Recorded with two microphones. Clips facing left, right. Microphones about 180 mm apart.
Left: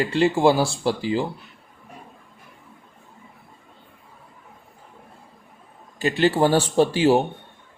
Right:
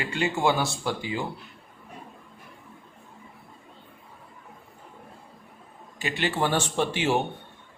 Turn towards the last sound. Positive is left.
turn(degrees=35)  # may be behind; listen again after turning